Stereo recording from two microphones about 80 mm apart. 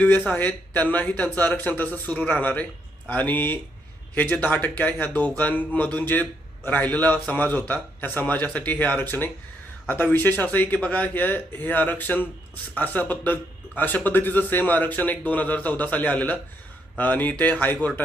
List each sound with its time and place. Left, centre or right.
0.3 s speech: left